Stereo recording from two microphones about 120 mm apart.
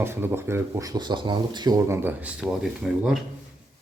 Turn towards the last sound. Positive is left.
turn(degrees=0)  # may be behind; listen again after turning